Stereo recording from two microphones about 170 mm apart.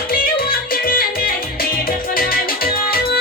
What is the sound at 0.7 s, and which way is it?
Music, 60° left (ahead or behind).